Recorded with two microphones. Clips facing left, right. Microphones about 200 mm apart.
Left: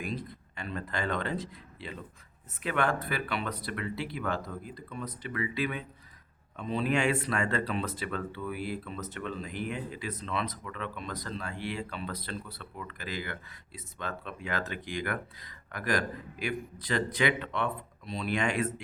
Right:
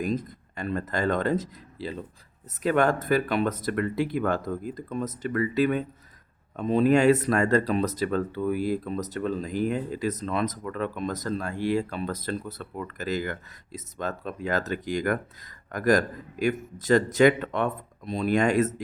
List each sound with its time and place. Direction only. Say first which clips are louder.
0.0 s speech: right 8 dB; 45° right (ahead or behind)